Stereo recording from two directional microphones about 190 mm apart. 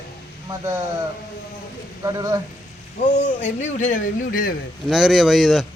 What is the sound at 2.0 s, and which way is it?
Speech, 20° right (ahead or behind).